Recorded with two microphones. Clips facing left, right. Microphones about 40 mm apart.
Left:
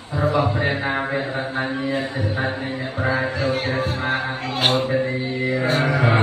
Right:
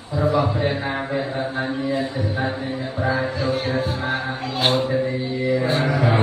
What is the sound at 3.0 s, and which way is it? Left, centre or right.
Music, left.